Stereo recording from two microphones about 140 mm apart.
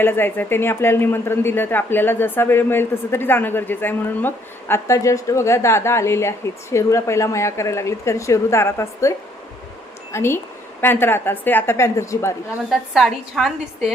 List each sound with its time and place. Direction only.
0.0 s speech: 15° left (ahead or behind)
12.7 s a woman's voice: centre (ahead or behind)